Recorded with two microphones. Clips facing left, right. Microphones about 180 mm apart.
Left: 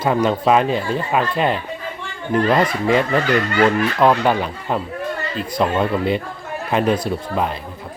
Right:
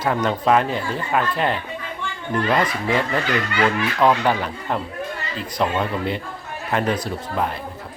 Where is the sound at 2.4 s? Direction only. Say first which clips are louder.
Left 4 dB; 35° left (ahead or behind).